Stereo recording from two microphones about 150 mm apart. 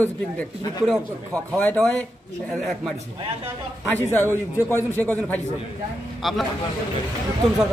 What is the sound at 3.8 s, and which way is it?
A man's voice, 10° left (ahead or behind).